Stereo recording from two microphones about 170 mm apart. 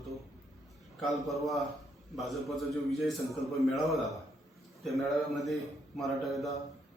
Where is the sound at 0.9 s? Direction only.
Centre (ahead or behind).